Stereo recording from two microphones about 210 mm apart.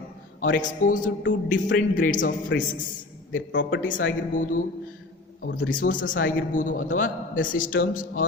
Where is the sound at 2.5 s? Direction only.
55° left (ahead or behind).